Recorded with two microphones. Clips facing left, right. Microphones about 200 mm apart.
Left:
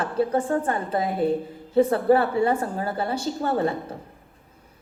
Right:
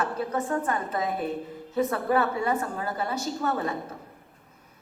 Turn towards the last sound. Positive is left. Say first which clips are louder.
# left 5 dB
turn(degrees=30)  # may be behind; listen again after turning